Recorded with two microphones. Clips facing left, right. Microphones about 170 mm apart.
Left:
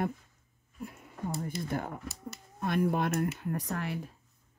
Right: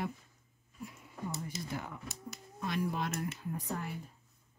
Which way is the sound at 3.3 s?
75° left (ahead or behind).